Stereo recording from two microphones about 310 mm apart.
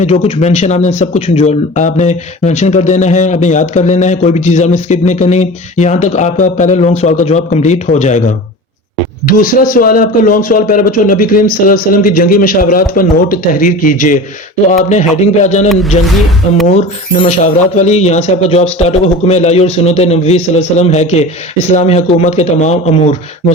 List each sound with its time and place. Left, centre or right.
0.0 s speech: left
9.2 s speech: left
16.0 s speech: centre
16.6 s speech: left